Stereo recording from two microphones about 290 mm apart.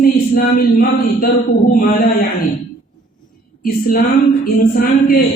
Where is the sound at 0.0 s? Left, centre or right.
Left.